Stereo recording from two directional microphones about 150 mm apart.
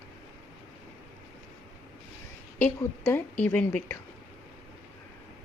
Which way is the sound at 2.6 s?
10° left (ahead or behind).